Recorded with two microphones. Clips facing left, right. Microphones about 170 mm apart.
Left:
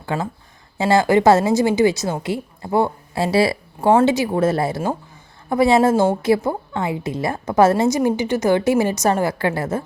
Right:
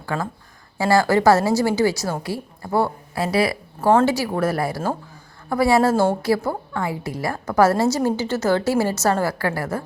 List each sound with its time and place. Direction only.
0.0 s a woman's voice: 20° left (ahead or behind)
3.8 s a woman's voice: 15° left (ahead or behind)